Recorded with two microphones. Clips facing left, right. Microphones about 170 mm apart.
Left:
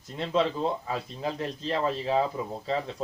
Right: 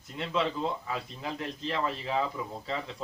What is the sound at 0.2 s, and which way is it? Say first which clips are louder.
Speech: left 4 dB; 35° left (ahead or behind).